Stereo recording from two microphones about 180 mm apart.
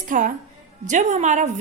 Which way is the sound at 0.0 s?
45° right (ahead or behind).